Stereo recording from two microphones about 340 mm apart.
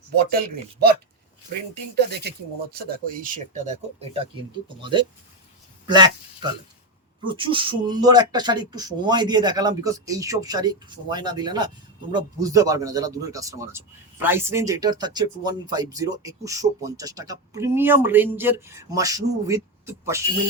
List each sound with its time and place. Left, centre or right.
0.2 s a man's voice: right; by 20.2 s centre